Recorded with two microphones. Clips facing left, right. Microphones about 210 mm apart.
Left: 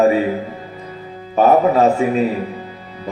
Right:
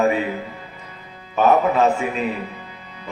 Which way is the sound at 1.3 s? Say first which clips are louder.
Left 4 dB; 35° left (ahead or behind).